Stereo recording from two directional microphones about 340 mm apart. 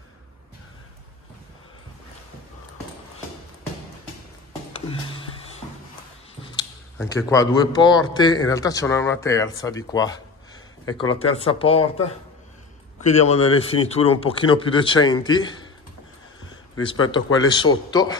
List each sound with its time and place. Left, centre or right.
6.4 s speech: centre
13.0 s speech: centre
17.1 s speech: centre